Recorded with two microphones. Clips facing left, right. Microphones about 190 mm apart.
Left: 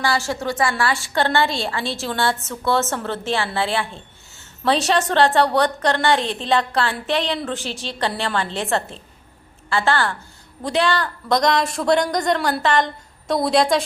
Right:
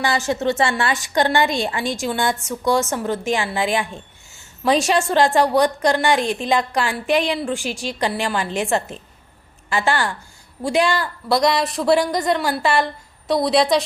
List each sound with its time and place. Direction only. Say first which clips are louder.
0.0 s a woman's voice: right 2 dB; 20° right (ahead or behind); by 13.8 s centre (ahead or behind)